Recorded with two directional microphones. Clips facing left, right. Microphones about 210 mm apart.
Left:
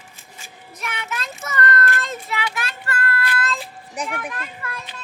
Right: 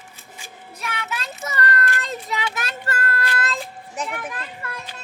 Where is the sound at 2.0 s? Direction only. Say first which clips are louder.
Even; 40° right (ahead or behind).